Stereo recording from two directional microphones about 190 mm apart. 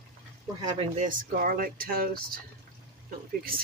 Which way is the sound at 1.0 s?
50° right (ahead or behind).